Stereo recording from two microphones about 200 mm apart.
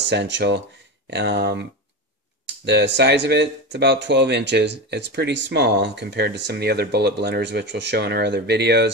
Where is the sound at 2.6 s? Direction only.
60° right (ahead or behind).